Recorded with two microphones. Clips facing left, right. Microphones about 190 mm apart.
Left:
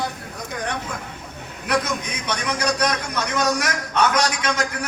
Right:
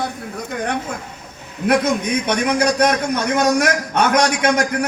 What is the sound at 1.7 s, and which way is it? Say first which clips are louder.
A man's voice: right 7 dB; 55° right (ahead or behind).